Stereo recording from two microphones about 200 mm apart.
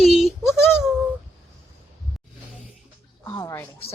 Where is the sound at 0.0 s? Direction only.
Centre (ahead or behind).